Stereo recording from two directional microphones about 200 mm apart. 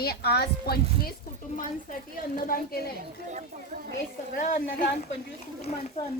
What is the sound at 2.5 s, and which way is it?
Speech, 45° left (ahead or behind).